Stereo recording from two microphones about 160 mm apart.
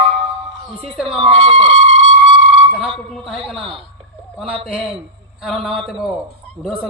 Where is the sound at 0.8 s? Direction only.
Centre (ahead or behind).